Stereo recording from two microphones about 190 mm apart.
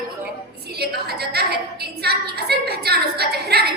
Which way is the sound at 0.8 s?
55° right (ahead or behind).